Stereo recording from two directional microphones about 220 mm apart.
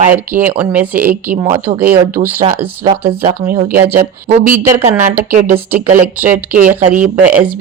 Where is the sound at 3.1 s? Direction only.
30° right (ahead or behind).